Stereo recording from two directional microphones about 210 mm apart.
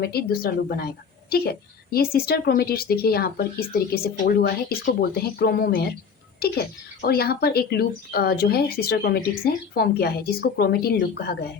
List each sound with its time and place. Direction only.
0.0 s a woman's voice: 45° left (ahead or behind)